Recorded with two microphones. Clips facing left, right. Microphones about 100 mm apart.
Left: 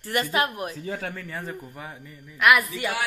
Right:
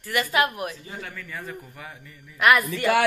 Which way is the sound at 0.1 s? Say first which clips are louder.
Right 1 dB; 35° left (ahead or behind).